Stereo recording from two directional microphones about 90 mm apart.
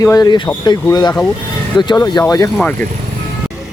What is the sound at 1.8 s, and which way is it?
Speech, 50° left (ahead or behind).